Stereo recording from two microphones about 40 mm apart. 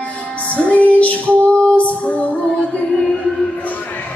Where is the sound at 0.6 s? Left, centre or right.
Left.